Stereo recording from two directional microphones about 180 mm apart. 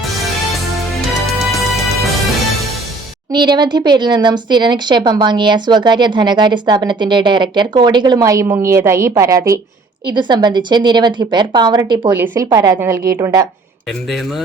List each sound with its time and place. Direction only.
1.3 s music: centre (ahead or behind)
3.3 s a woman's voice: 25° right (ahead or behind)
12.1 s a woman's voice: 10° right (ahead or behind)